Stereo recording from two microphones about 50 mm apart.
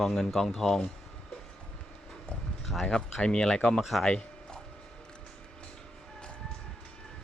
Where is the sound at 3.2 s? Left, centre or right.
Centre.